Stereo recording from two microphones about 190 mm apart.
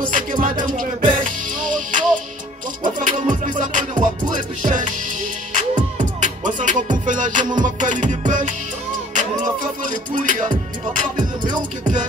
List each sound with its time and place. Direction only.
0.0 s music: 45° right (ahead or behind)
6.2 s music: 40° right (ahead or behind)